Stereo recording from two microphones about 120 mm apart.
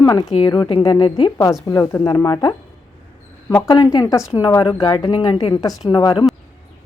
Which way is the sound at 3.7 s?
40° left (ahead or behind).